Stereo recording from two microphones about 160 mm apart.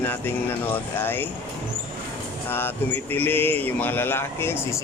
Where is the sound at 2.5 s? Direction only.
15° left (ahead or behind).